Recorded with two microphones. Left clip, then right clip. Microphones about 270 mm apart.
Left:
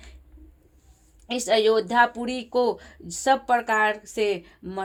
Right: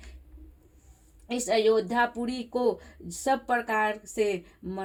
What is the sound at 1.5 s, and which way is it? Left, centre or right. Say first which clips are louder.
Speech: left 4 dB; left.